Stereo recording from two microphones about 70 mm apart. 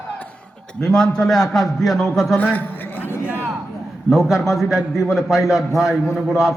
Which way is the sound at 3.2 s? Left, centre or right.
Right.